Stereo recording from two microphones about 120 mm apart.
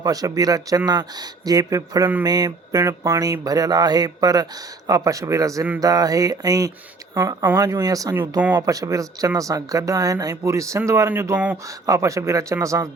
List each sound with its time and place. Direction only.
0.0 s speech: 30° right (ahead or behind)